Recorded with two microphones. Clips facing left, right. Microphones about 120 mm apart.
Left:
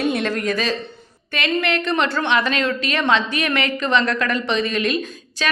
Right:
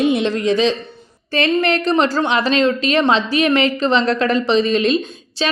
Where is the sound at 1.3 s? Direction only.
35° right (ahead or behind).